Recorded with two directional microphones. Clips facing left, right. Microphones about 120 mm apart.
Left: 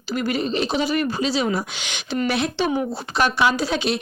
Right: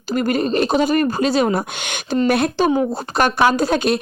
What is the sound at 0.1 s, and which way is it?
Speech, 45° right (ahead or behind).